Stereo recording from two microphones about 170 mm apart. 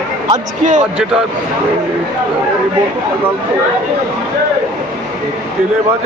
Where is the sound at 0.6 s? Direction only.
45° right (ahead or behind).